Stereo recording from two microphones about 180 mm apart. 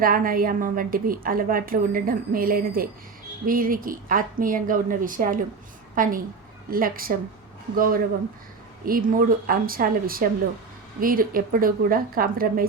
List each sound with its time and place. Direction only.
0.0 s a woman's voice: 50° right (ahead or behind)